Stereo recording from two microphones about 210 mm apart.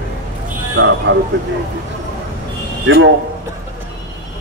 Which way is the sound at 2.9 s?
60° right (ahead or behind).